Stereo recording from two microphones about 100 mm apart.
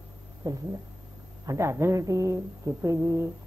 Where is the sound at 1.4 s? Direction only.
30° right (ahead or behind).